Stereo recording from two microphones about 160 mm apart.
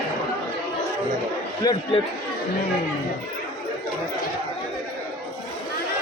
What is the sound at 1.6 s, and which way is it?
Speech, 25° left (ahead or behind).